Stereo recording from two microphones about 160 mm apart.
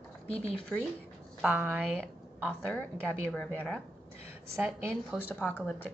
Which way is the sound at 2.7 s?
5° left (ahead or behind).